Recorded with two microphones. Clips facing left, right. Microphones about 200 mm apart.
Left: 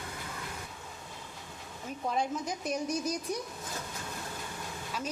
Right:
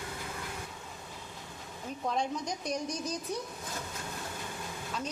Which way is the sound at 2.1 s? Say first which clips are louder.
Left 1 dB; 5° left (ahead or behind).